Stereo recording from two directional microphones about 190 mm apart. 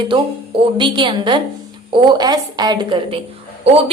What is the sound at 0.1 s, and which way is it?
A woman's voice, 25° right (ahead or behind).